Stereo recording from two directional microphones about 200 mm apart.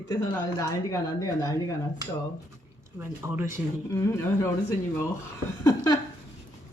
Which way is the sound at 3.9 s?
15° left (ahead or behind).